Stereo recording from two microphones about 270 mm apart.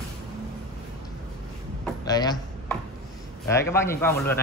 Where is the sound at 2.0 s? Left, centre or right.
Centre.